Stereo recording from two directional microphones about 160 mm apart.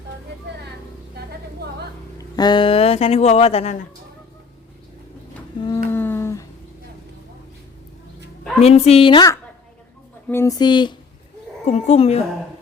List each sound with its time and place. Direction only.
1.6 s vehicle: 90° right
2.1 s speech: 25° left (ahead or behind); by 3.8 s 40° left (ahead or behind)
5.6 s humming: 15° left (ahead or behind)
8.6 s a woman's voice: 40° left (ahead or behind)
11.6 s speech: 45° left (ahead or behind)